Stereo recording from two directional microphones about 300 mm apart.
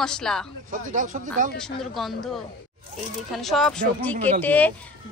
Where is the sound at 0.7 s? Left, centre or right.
Right.